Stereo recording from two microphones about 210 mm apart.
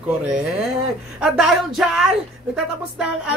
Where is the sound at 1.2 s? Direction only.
5° right (ahead or behind).